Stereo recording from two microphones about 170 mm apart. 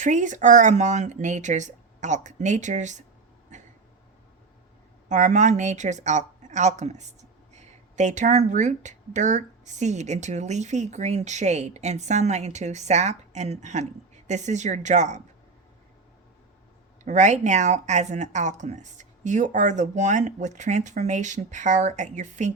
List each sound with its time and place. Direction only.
0.0 s speech: 45° right (ahead or behind)
3.5 s a sound: 45° right (ahead or behind)
5.0 s speech: 45° right (ahead or behind)
17.0 s speech: 45° right (ahead or behind)